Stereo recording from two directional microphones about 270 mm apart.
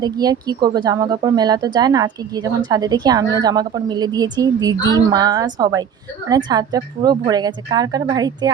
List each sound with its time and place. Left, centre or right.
0.0 s speech: centre